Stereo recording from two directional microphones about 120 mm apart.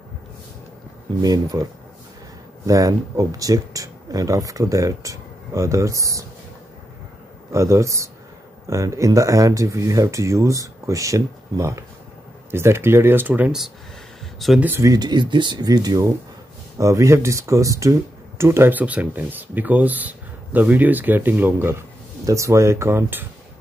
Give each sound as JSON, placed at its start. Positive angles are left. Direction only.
{"t": 1.2, "sound": "speech", "side_deg": -30}
{"t": 7.5, "sound": "speech", "side_deg": -25}
{"t": 14.4, "sound": "speech", "side_deg": 0}
{"t": 14.8, "sound": "speech", "side_deg": -30}